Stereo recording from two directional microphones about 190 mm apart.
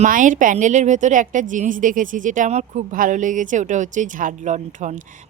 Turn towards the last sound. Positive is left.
turn(degrees=-40)  # may be behind; listen again after turning